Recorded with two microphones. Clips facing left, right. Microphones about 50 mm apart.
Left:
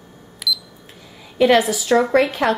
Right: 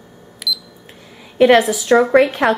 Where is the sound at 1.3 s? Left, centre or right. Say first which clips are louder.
Right 3 dB; centre.